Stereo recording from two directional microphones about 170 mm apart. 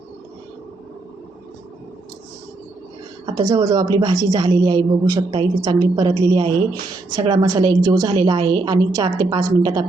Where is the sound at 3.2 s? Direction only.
25° right (ahead or behind).